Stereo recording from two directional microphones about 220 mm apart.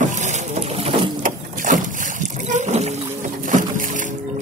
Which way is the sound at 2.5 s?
30° right (ahead or behind).